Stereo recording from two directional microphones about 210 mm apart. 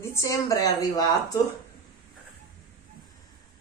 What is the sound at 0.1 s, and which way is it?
Speech, 15° left (ahead or behind).